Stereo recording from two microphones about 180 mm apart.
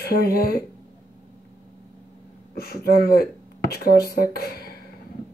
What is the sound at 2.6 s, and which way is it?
Speech, 55° left (ahead or behind).